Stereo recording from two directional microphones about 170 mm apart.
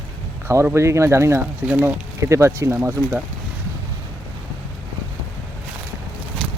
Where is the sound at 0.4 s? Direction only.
15° right (ahead or behind).